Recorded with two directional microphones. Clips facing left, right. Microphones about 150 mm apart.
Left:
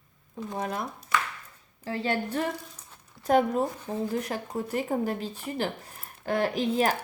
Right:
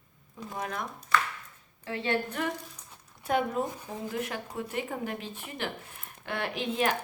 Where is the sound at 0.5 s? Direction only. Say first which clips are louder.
Left 3 dB; 30° left (ahead or behind).